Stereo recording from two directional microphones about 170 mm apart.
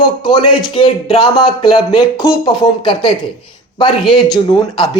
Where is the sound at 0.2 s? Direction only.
30° left (ahead or behind).